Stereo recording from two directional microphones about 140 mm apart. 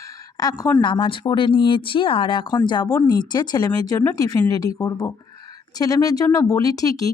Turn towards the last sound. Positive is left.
turn(degrees=25)  # may be behind; listen again after turning